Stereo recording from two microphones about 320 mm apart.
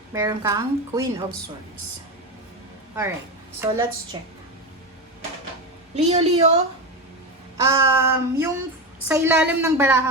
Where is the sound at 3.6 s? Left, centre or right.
Centre.